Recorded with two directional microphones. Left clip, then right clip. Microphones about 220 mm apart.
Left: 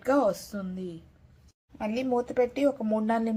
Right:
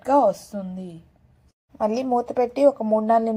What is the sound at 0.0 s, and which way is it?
A woman's voice, 10° right (ahead or behind).